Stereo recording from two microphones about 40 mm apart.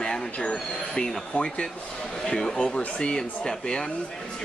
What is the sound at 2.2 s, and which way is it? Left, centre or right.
Speech, centre.